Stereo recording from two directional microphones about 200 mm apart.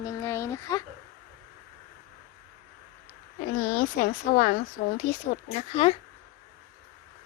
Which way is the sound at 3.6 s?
45° left (ahead or behind).